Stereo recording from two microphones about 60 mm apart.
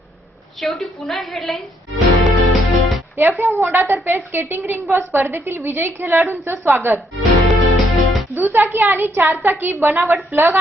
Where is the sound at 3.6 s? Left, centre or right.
Right.